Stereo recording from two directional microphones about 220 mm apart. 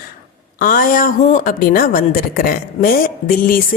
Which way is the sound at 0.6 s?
40° left (ahead or behind).